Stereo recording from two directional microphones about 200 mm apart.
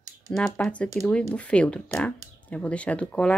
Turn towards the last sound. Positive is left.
turn(degrees=5)  # may be behind; listen again after turning